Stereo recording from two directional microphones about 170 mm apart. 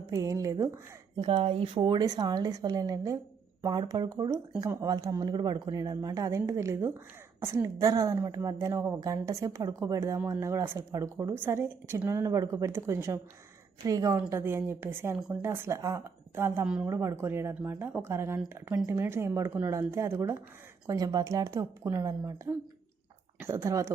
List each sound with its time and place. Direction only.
0.1 s speech: 20° right (ahead or behind)
23.4 s speech: 15° right (ahead or behind)